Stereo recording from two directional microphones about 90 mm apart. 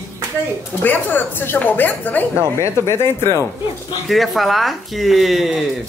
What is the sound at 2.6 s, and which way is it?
Speech, 30° left (ahead or behind).